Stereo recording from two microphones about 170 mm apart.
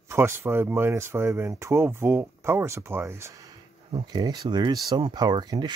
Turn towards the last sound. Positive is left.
turn(degrees=-25)  # may be behind; listen again after turning